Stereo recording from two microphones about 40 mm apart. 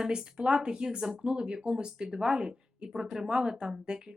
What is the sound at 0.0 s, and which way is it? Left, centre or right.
Speech, centre.